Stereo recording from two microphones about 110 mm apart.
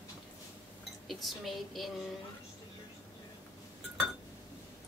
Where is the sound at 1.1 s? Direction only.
Centre (ahead or behind).